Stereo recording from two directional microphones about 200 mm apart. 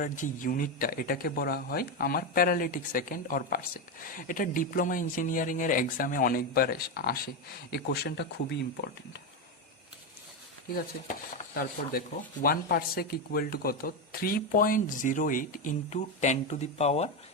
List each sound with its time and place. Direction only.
0.0 s speech: 40° left (ahead or behind)
10.8 s speech: 45° left (ahead or behind)